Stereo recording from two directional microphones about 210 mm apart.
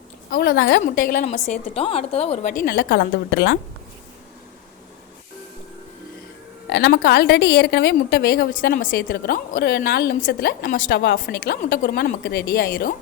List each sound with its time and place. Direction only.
0.3 s a woman's voice: 50° left (ahead or behind)
6.7 s a woman's voice: 50° left (ahead or behind)